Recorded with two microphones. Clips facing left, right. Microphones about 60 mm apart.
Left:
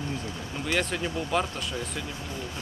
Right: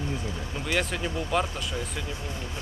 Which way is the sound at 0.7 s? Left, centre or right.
Centre.